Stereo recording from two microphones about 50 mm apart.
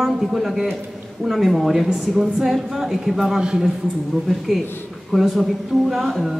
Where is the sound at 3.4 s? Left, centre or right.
Centre.